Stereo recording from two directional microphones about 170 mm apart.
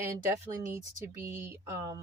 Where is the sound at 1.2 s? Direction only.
15° right (ahead or behind).